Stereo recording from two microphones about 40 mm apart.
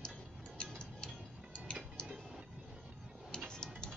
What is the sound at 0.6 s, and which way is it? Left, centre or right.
Tick-tock, left.